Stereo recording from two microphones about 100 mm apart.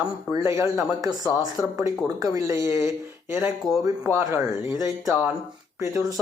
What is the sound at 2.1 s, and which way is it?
Speech, 35° right (ahead or behind).